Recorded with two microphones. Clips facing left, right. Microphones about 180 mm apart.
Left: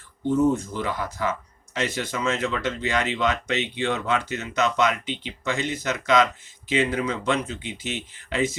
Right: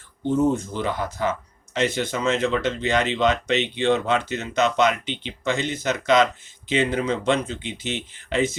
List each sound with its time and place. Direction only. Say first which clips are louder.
0.7 s speech: right 2 dB; 25° right (ahead or behind)